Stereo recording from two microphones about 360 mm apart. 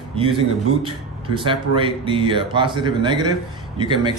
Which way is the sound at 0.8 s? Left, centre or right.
Centre.